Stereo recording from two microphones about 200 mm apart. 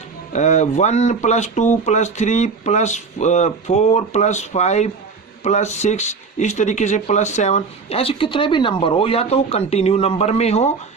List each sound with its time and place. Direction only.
0.3 s speech: 35° left (ahead or behind)